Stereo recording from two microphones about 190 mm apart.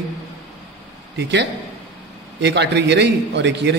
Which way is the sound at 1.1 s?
65° right (ahead or behind).